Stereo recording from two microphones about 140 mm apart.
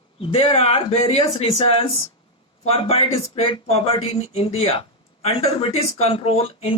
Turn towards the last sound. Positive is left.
turn(degrees=45)  # may be behind; listen again after turning